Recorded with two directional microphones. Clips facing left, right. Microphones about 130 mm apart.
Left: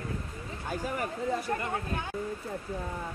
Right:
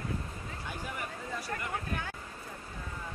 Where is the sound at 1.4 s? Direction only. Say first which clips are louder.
Left 5 dB; 25° left (ahead or behind).